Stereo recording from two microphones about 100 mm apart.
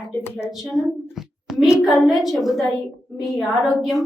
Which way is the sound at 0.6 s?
Centre (ahead or behind).